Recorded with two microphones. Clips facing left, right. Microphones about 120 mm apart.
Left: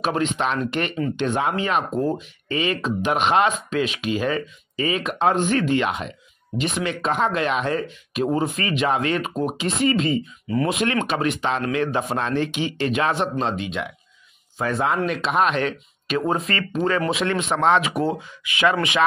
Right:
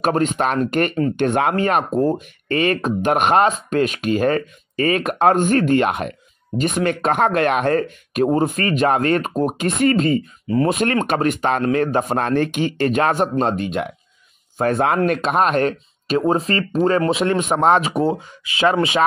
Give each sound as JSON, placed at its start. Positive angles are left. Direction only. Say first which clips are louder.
{"t": 0.0, "sound": "speech", "louder": "right 4 dB", "side_deg": -45}
{"t": 16.2, "sound": "speech", "louder": "right 5 dB", "side_deg": -35}